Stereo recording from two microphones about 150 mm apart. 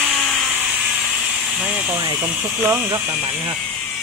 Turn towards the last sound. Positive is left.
turn(degrees=-20)  # may be behind; listen again after turning